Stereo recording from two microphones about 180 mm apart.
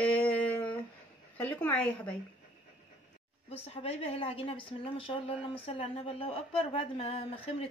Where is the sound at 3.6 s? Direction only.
35° left (ahead or behind).